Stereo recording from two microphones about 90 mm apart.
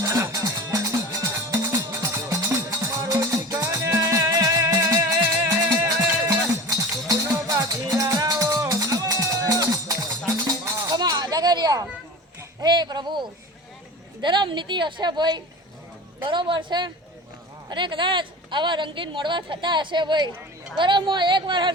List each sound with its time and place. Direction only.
0.0 s music: 35° right (ahead or behind)
6.2 s music: 45° right (ahead or behind)
12.5 s a sound: 50° right (ahead or behind)
16.2 s speech: 65° right (ahead or behind)